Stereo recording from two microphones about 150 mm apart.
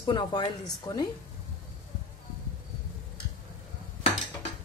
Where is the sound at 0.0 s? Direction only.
30° left (ahead or behind).